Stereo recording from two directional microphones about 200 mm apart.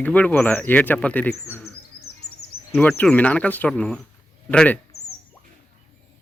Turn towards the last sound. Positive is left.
turn(degrees=5)  # may be behind; listen again after turning